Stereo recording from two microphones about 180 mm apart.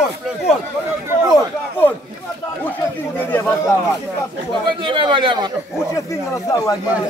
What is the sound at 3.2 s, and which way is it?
Speech, 10° left (ahead or behind).